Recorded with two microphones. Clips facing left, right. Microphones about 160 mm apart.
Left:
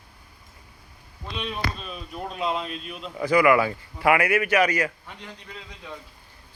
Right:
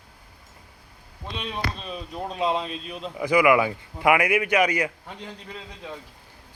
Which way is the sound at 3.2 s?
15° right (ahead or behind).